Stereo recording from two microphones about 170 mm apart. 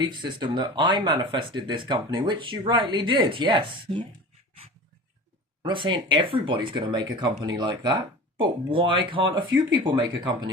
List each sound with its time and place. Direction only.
0.0 s speech: 25° right (ahead or behind)
5.6 s speech: 25° right (ahead or behind)